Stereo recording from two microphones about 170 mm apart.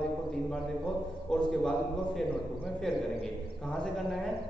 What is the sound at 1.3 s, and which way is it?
Speech, 5° left (ahead or behind).